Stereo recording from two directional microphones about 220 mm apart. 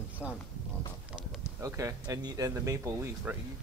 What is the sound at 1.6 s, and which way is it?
Speech, 15° right (ahead or behind).